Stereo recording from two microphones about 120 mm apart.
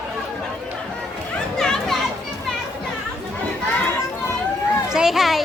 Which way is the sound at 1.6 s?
5° left (ahead or behind).